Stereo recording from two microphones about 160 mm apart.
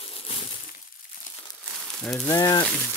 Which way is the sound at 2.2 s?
20° left (ahead or behind).